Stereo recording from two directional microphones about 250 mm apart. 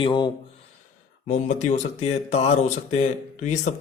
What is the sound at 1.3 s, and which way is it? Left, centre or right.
Speech, left.